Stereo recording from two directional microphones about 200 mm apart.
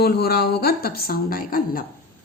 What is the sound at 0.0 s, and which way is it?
Speech, 50° left (ahead or behind).